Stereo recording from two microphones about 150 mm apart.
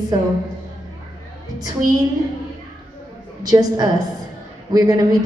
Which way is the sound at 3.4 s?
25° right (ahead or behind).